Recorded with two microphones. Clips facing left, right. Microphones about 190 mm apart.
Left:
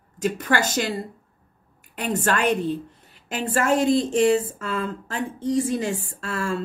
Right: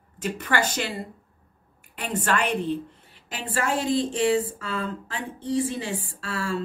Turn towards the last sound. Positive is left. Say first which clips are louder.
# left 3 dB
turn(degrees=45)  # may be behind; listen again after turning